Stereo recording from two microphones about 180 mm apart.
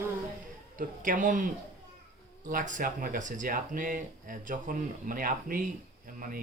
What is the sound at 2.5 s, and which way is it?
Speech, 45° right (ahead or behind).